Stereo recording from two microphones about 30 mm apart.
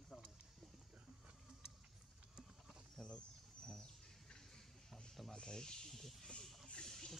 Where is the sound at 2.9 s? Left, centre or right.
Left.